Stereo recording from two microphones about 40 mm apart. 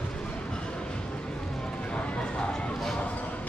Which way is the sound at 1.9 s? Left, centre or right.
Left.